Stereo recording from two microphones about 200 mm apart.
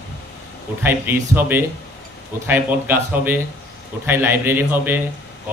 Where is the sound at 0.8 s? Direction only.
10° right (ahead or behind).